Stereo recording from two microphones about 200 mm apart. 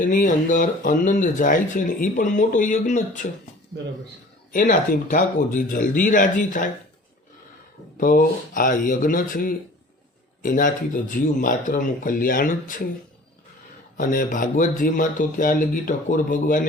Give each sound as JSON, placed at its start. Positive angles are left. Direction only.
{"t": 0.0, "sound": "speech", "side_deg": 45}
{"t": 4.5, "sound": "speech", "side_deg": 40}
{"t": 7.9, "sound": "speech", "side_deg": 45}
{"t": 13.9, "sound": "speech", "side_deg": 45}